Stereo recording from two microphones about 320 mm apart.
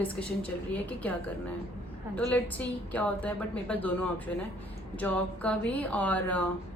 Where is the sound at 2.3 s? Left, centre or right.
Centre.